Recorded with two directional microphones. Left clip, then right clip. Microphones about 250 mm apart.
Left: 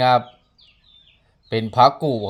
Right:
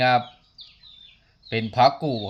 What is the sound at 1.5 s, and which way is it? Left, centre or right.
Speech, centre.